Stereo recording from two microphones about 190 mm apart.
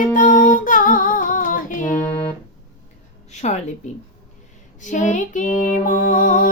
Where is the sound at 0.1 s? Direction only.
45° left (ahead or behind).